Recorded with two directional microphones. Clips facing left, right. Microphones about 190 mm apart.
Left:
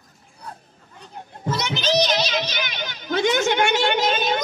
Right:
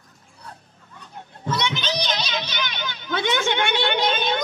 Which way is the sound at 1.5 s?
40° left (ahead or behind).